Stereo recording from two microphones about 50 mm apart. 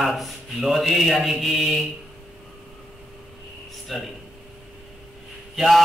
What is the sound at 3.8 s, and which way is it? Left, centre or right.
Speech, centre.